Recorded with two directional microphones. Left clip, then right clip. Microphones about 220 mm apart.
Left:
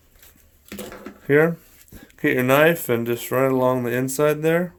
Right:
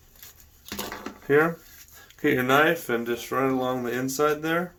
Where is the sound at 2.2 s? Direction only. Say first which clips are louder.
Left 4 dB; 45° left (ahead or behind).